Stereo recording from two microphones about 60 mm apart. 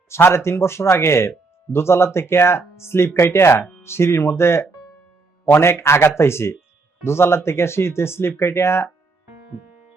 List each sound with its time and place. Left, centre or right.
0.1 s speech: left